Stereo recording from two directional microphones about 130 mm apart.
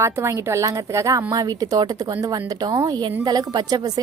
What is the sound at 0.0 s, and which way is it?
A woman's voice, 20° right (ahead or behind).